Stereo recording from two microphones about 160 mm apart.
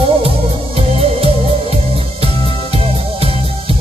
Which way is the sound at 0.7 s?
35° right (ahead or behind).